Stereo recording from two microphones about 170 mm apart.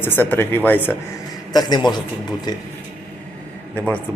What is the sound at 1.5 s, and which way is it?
Speech, 25° left (ahead or behind).